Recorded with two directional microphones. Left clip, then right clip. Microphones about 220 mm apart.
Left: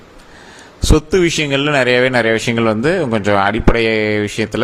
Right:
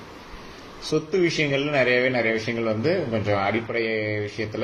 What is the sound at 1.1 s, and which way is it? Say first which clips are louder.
Speech: left 5 dB; 50° left (ahead or behind).